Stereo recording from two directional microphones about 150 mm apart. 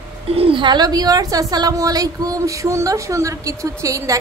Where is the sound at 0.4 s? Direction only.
35° right (ahead or behind).